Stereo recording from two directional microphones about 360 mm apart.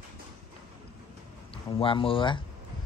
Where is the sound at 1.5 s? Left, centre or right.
Centre.